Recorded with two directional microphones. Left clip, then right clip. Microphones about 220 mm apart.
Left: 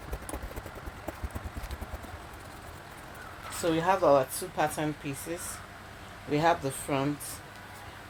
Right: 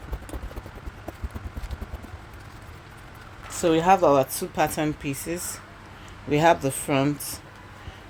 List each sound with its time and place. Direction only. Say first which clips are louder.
3.6 s speech: right 7 dB; 50° right (ahead or behind)